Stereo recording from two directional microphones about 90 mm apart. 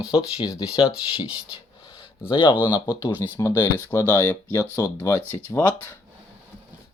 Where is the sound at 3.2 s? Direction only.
35° left (ahead or behind).